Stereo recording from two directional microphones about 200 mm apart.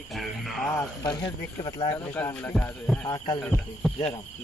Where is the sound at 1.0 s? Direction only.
20° left (ahead or behind).